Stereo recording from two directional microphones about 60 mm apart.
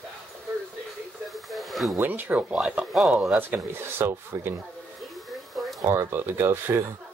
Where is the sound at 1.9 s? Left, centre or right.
Right.